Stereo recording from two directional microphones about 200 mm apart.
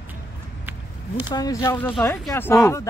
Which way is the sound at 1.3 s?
20° left (ahead or behind).